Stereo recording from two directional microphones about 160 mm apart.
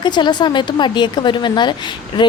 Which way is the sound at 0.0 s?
30° left (ahead or behind).